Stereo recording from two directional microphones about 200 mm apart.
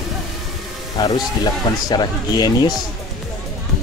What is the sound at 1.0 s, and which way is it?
Speech, 20° left (ahead or behind).